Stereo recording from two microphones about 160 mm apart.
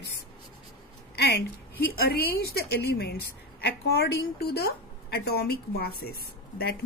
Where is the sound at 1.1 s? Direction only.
90° left.